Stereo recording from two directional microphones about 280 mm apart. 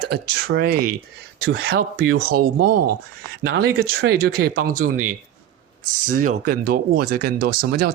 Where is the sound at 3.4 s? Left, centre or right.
Right.